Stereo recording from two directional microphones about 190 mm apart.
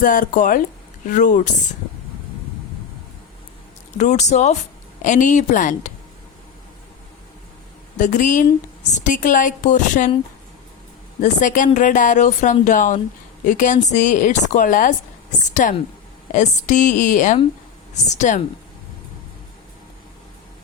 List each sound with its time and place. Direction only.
0.0 s speech: 45° left (ahead or behind)
3.9 s a woman's voice: 40° left (ahead or behind)
7.9 s a woman's voice: 40° left (ahead or behind)
11.2 s a woman's voice: 40° left (ahead or behind)